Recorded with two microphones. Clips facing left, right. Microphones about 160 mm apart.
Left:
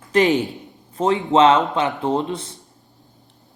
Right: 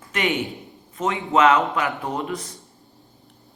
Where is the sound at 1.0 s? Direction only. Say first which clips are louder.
Left 4 dB; 30° left (ahead or behind).